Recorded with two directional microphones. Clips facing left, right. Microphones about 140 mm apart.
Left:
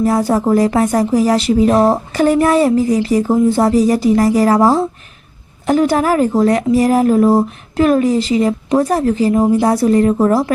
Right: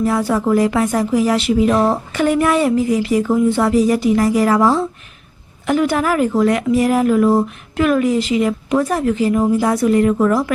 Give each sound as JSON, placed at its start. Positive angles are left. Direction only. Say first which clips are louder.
{"t": 0.0, "sound": "speech", "louder": "left 3 dB", "side_deg": 40}